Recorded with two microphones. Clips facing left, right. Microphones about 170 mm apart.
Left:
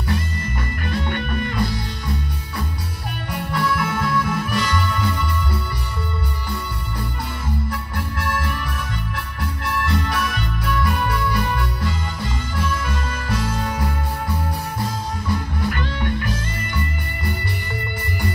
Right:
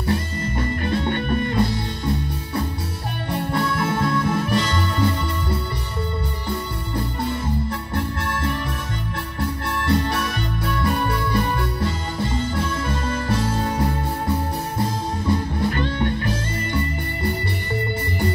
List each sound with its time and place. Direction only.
0.0 s music: 30° right (ahead or behind)
7.2 s music: 25° right (ahead or behind)
9.4 s organ: 30° right (ahead or behind)
14.8 s music: 25° right (ahead or behind)